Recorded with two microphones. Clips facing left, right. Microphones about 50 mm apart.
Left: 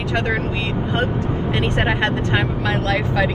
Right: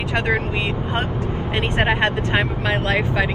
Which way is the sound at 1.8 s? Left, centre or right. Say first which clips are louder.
Right 3 dB; right.